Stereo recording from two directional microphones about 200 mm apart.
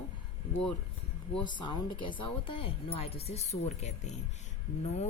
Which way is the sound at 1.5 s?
20° left (ahead or behind).